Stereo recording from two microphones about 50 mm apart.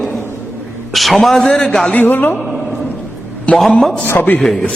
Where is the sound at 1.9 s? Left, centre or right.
Left.